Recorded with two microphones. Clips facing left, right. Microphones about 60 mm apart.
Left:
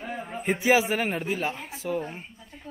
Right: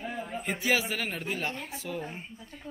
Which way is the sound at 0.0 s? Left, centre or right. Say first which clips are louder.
Left 3 dB; centre.